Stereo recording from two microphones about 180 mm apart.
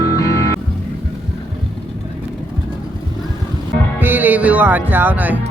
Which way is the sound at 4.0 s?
10° right (ahead or behind).